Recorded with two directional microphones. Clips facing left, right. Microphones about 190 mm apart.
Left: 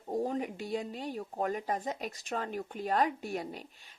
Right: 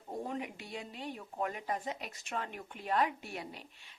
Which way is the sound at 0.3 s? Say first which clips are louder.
Left 6 dB; 40° left (ahead or behind).